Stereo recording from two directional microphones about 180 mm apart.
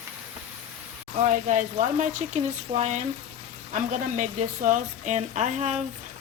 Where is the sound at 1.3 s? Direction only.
45° right (ahead or behind).